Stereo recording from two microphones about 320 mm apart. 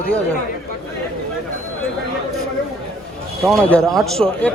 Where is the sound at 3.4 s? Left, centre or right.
Centre.